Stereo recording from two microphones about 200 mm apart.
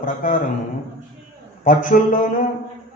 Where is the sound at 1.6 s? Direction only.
40° left (ahead or behind).